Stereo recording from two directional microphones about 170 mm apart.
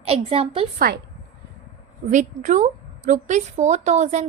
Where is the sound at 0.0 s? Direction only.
35° right (ahead or behind).